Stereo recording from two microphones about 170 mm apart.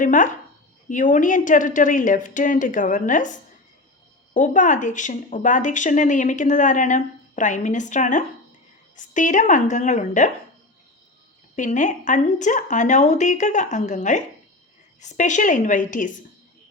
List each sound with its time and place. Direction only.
0.0 s speech: 50° left (ahead or behind)
4.4 s speech: 50° left (ahead or behind)
11.5 s speech: 45° left (ahead or behind)